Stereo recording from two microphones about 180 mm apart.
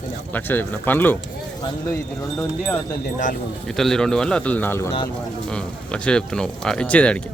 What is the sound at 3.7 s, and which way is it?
Speech, centre (ahead or behind).